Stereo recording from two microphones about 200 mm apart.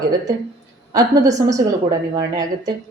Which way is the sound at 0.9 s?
15° right (ahead or behind).